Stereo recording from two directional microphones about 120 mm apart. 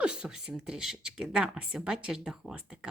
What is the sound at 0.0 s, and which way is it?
Speech, 5° right (ahead or behind).